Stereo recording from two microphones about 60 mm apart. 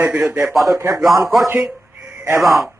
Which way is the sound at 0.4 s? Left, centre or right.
Centre.